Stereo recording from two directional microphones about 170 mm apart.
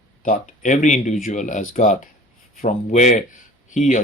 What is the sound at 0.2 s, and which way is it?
Speech, 50° left (ahead or behind).